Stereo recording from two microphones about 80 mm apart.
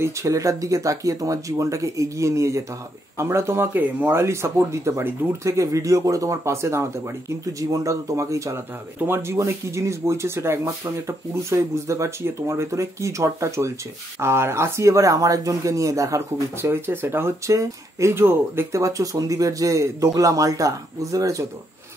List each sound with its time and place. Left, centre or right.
0.0 s speech: right
9.0 s speech: right
16.6 s speech: right
18.8 s speech: right